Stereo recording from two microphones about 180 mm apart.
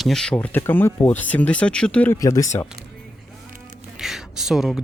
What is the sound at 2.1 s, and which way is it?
Speech, 20° left (ahead or behind).